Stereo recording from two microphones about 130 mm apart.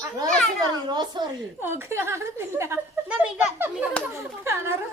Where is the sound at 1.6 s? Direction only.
15° right (ahead or behind).